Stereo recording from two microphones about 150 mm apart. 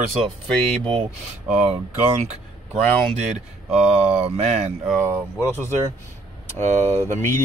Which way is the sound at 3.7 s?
5° right (ahead or behind).